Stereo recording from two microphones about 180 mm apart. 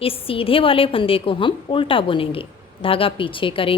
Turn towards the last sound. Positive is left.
turn(degrees=30)  # may be behind; listen again after turning